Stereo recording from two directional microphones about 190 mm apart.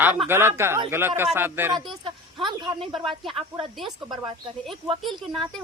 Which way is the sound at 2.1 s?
25° right (ahead or behind).